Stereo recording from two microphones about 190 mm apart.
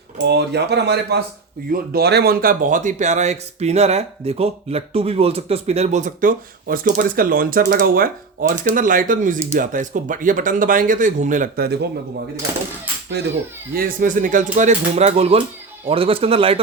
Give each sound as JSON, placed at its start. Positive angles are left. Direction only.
{"t": 0.3, "sound": "speech", "side_deg": -60}
{"t": 13.7, "sound": "speech", "side_deg": -50}